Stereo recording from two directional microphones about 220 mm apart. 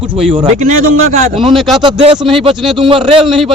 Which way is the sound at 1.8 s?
25° right (ahead or behind).